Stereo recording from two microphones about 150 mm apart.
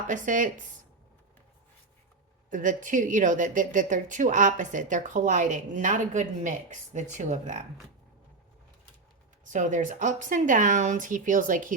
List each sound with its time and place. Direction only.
0.1 s speech: 60° right (ahead or behind)
2.5 s speech: 60° right (ahead or behind)
9.4 s speech: 55° right (ahead or behind)